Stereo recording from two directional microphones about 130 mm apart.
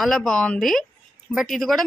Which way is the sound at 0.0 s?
5° left (ahead or behind).